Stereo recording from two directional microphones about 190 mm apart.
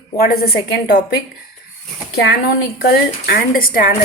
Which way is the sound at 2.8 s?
60° left (ahead or behind).